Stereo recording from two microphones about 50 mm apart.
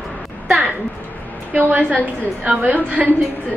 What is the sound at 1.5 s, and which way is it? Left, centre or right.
A woman's voice, right.